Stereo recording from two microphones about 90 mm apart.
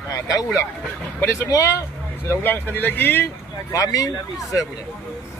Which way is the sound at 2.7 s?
20° left (ahead or behind).